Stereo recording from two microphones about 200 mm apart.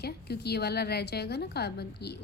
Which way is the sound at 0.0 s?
55° left (ahead or behind).